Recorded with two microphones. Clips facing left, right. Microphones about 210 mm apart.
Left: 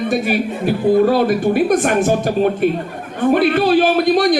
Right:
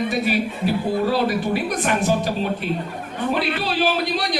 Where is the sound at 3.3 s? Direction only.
50° left (ahead or behind).